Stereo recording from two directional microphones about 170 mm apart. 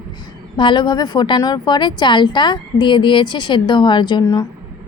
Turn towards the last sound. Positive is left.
turn(degrees=25)  # may be behind; listen again after turning